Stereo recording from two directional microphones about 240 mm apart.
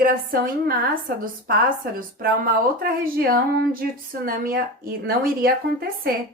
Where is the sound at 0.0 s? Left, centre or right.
Right.